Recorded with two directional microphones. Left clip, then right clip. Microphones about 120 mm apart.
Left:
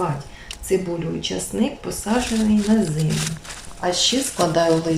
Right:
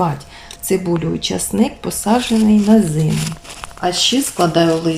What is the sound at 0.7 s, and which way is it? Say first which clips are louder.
Speech: right 4 dB; 25° right (ahead or behind).